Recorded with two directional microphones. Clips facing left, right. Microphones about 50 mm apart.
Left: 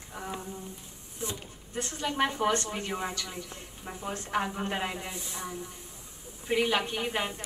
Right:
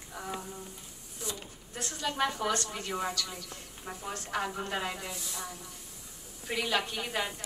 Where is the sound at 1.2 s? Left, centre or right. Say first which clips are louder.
Left 3 dB; left.